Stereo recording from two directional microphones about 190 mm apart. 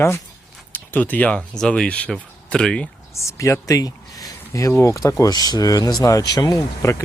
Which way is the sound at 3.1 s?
15° left (ahead or behind).